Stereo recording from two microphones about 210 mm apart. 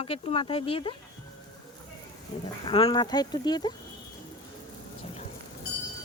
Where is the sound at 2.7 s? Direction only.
25° left (ahead or behind).